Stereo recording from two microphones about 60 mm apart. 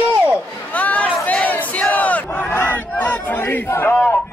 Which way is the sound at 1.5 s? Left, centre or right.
Left.